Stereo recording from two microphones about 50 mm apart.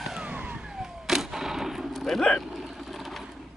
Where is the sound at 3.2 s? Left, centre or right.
Centre.